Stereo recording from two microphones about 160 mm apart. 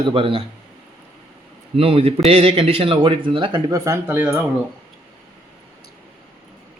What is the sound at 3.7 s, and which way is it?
Speech, 20° right (ahead or behind).